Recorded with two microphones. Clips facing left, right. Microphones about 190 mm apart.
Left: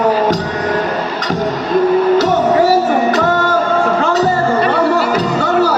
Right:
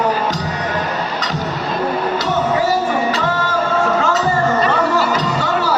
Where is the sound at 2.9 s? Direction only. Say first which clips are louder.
Left 5 dB; 50° left (ahead or behind).